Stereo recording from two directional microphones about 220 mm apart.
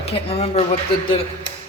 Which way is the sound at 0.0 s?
25° left (ahead or behind).